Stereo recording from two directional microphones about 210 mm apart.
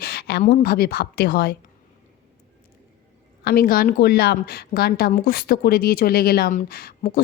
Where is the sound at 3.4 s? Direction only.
45° left (ahead or behind).